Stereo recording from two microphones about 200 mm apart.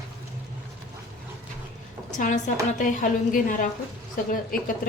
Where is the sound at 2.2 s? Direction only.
40° left (ahead or behind).